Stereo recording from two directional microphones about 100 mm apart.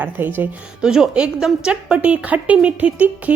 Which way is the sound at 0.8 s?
5° right (ahead or behind).